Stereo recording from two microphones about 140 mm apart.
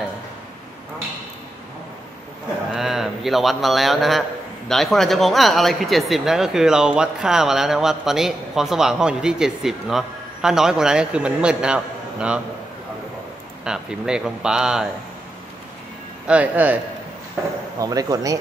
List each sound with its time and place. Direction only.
2.7 s a man's voice: centre (ahead or behind)
13.7 s speech: 5° right (ahead or behind)
16.3 s speech: 10° right (ahead or behind)
17.7 s speech: 25° right (ahead or behind)